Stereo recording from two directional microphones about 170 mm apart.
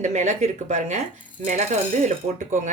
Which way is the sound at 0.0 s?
45° right (ahead or behind).